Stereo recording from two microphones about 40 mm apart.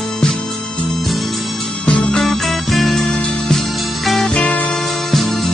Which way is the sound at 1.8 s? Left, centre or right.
Left.